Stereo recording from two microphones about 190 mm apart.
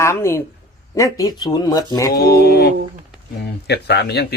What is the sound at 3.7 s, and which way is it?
Speech, 60° left (ahead or behind).